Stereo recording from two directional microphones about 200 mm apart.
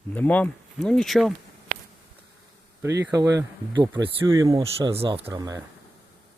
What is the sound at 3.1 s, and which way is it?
Speech, 15° right (ahead or behind).